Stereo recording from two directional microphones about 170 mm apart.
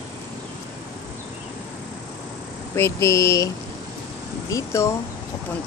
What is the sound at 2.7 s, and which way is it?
Speech, 15° left (ahead or behind).